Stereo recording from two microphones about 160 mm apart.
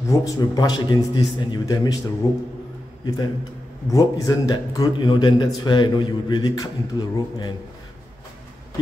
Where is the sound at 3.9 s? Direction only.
20° left (ahead or behind).